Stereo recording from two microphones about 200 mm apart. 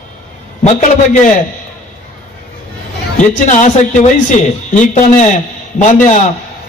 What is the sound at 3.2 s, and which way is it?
A man's voice, 40° left (ahead or behind).